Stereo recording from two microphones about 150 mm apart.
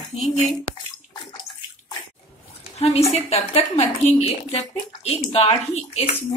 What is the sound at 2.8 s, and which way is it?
A woman's voice, 45° left (ahead or behind).